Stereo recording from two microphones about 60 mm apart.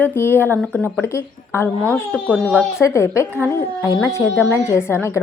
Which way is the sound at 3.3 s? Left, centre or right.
Left.